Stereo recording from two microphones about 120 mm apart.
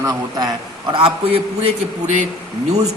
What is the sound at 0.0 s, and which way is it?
Speech, 30° right (ahead or behind).